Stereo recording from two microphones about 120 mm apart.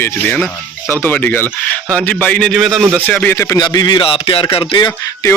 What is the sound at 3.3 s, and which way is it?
Speech, 25° left (ahead or behind).